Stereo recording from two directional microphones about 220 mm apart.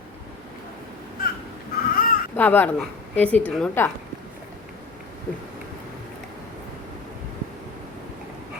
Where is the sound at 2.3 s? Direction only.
10° left (ahead or behind).